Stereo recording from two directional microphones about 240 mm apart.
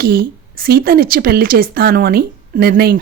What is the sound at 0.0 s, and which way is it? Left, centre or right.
A woman's voice, right.